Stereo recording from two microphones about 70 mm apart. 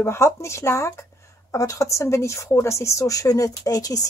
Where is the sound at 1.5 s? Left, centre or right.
Left.